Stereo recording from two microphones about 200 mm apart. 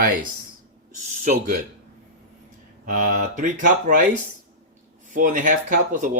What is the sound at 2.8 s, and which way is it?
Speech, 40° right (ahead or behind).